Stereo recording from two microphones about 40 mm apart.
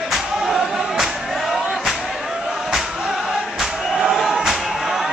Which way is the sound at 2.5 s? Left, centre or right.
Centre.